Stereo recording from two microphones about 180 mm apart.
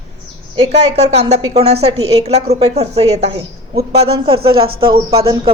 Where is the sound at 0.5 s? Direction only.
35° right (ahead or behind).